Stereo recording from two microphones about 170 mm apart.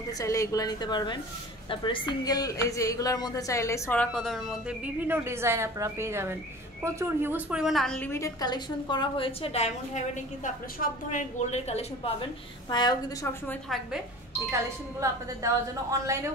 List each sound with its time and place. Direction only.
0.2 s a woman's voice: 20° left (ahead or behind); by 4.7 s centre (ahead or behind)
5.0 s a woman's voice: 15° right (ahead or behind); by 13.3 s 25° left (ahead or behind)
14.5 s a woman's voice: 20° right (ahead or behind)